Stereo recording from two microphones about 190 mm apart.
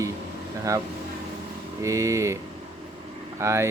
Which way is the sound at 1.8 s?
15° right (ahead or behind).